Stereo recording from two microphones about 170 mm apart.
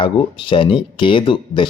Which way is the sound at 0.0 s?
30° left (ahead or behind).